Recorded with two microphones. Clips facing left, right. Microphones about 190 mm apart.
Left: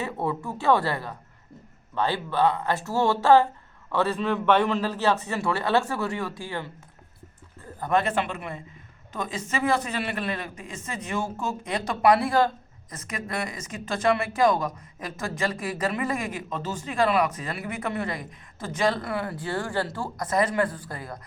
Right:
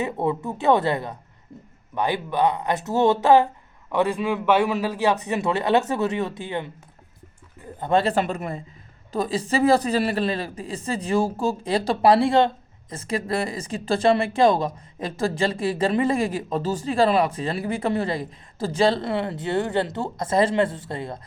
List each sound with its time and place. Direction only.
0.0 s a man's voice: 20° right (ahead or behind)